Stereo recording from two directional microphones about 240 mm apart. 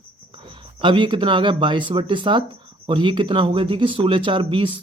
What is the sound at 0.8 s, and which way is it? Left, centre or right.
Speech, centre.